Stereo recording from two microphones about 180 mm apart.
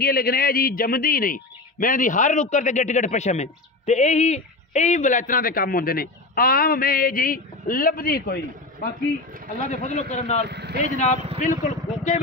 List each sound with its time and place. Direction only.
0.0 s speech: 55° left (ahead or behind)
9.7 s a man's voice: 40° left (ahead or behind)
10.5 s vehicle: 65° right (ahead or behind)
11.1 s speech: 35° right (ahead or behind)
11.4 s a man's voice: 45° left (ahead or behind)